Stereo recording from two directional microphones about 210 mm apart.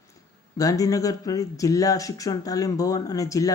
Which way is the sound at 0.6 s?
15° left (ahead or behind).